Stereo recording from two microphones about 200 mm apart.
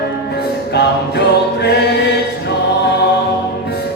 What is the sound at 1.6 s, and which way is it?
Choir, 55° left (ahead or behind).